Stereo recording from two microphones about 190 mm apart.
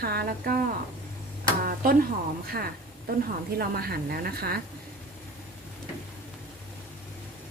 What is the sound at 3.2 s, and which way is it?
A woman's voice, 55° right (ahead or behind).